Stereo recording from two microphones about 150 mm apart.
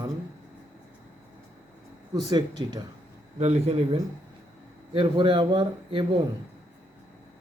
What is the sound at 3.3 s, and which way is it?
Speech, 45° right (ahead or behind).